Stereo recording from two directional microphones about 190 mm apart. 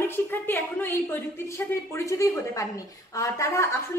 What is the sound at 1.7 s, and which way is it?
A woman's voice, 15° left (ahead or behind).